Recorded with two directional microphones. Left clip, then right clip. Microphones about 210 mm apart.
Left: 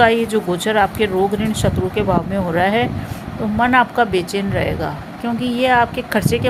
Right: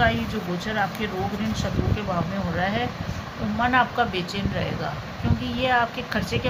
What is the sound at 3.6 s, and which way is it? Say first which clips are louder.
Speech: left 7 dB; 45° left (ahead or behind).